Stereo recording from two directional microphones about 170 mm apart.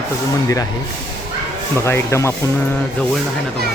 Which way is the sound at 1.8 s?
15° left (ahead or behind).